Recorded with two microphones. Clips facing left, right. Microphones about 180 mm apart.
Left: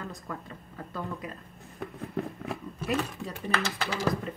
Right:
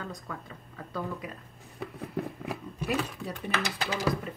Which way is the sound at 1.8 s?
Centre (ahead or behind).